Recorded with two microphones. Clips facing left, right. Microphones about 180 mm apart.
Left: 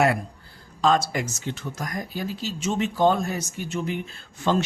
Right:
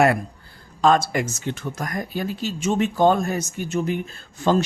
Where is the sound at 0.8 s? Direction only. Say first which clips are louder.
Right 3 dB; 55° right (ahead or behind).